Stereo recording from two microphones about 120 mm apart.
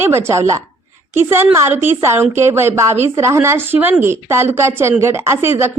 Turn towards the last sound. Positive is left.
turn(degrees=-20)  # may be behind; listen again after turning